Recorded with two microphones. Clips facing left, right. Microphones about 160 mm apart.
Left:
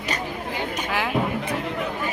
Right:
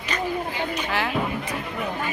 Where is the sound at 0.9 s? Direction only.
10° left (ahead or behind).